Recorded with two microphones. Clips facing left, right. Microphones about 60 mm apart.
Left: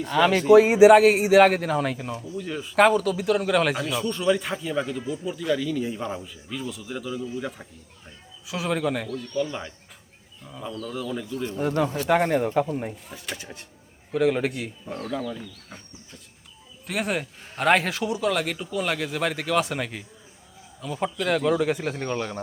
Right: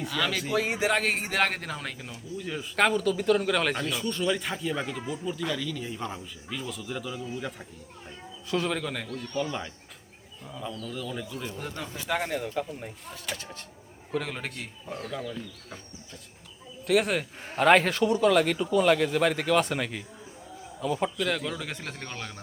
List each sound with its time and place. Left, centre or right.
0.1 s speech: left; by 11.5 s centre
12.0 s speech: left
13.1 s speech: centre
16.8 s speech: centre
21.2 s speech: centre